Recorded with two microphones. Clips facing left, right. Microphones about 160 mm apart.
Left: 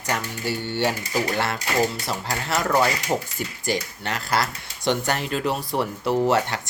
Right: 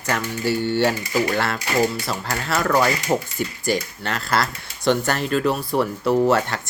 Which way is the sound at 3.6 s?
20° left (ahead or behind).